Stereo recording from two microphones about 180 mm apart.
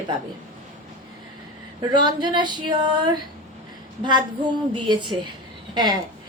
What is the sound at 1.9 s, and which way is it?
A woman's voice, 25° right (ahead or behind).